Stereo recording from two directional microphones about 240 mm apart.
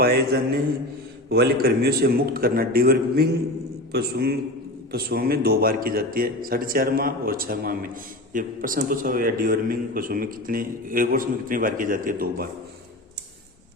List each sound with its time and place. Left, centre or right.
0.0 s a man's voice: right